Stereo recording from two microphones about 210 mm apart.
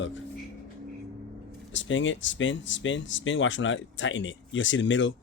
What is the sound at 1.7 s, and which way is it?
Speech, 60° left (ahead or behind).